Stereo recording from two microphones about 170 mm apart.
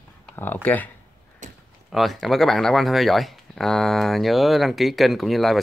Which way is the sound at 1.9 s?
Centre (ahead or behind).